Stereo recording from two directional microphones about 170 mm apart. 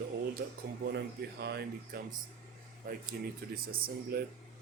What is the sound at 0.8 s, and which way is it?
Speech, 80° right.